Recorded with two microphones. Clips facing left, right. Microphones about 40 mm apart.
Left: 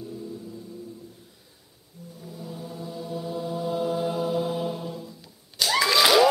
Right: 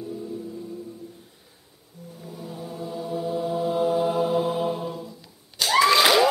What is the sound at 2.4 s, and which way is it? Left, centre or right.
Mantra, right.